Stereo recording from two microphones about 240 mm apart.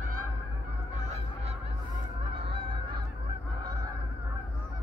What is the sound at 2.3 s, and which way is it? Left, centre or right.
Goose, right.